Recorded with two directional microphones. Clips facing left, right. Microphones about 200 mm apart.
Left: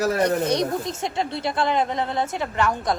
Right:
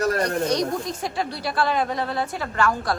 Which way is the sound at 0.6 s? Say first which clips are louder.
Left 1 dB; 25° left (ahead or behind).